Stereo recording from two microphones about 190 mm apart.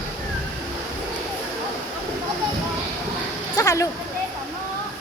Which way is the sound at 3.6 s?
15° left (ahead or behind).